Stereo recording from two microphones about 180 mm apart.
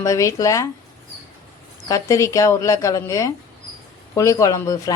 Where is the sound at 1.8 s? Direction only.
20° left (ahead or behind).